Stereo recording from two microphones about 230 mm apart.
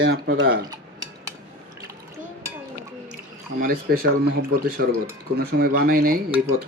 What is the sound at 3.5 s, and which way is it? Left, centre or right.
Speech, right.